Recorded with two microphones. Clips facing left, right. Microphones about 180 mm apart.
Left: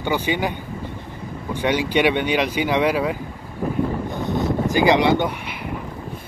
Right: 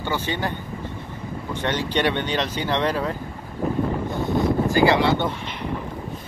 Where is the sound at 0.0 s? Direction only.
15° left (ahead or behind).